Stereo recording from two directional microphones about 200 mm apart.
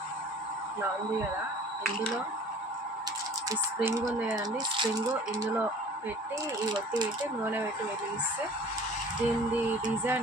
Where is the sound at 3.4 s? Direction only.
15° right (ahead or behind).